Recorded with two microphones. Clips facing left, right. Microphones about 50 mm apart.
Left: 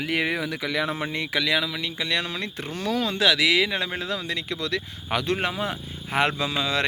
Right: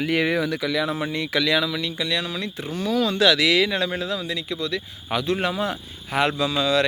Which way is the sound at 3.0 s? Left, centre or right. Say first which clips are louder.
Right 3 dB; left.